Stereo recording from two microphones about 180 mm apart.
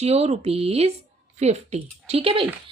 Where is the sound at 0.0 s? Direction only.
35° right (ahead or behind).